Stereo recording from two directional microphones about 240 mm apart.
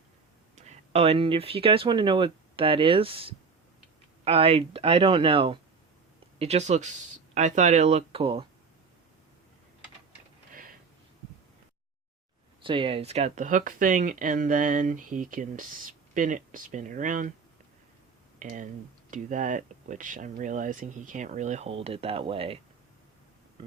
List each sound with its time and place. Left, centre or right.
0.5 s speech: right
12.6 s speech: right
18.3 s speech: right